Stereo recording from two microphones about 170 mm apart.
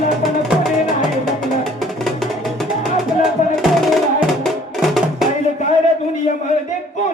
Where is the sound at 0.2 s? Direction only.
Centre (ahead or behind).